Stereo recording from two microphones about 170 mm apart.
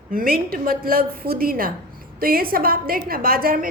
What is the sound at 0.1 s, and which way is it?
A woman's voice, 55° right (ahead or behind).